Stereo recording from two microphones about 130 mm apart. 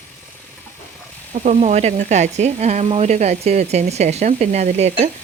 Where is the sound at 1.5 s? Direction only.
60° right (ahead or behind).